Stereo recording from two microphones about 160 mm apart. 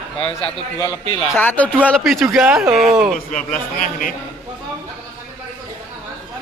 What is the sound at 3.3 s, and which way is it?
Speech, 55° left (ahead or behind).